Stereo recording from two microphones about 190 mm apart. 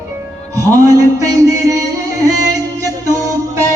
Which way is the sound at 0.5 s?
15° right (ahead or behind).